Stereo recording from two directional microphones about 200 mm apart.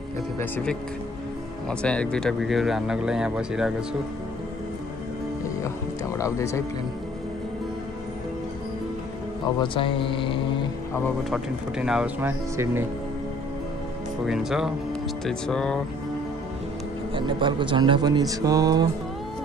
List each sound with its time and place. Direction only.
0.4 s speech: 5° left (ahead or behind)
6.1 s speech: 15° left (ahead or behind)
9.6 s mantra: 25° left (ahead or behind)
11.2 s speech: 5° right (ahead or behind)
14.2 s speech: centre (ahead or behind)
17.1 s speech: 25° right (ahead or behind)